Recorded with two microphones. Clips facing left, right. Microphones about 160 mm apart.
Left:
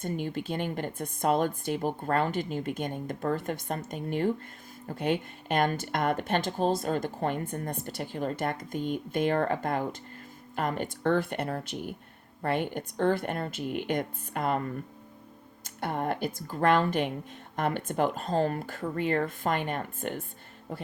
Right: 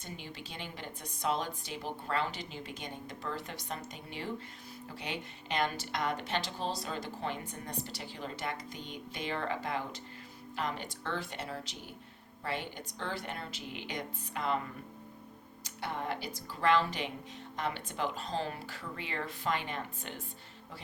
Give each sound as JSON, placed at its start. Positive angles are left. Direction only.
{"t": 0.0, "sound": "speech", "side_deg": 50}